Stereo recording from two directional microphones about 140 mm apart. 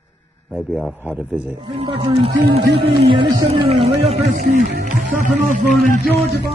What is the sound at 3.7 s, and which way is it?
Speech, 50° right (ahead or behind).